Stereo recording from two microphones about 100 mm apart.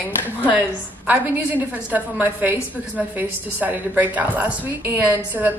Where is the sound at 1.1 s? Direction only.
15° right (ahead or behind).